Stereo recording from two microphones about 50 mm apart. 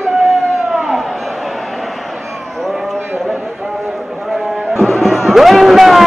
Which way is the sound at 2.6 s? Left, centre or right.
Centre.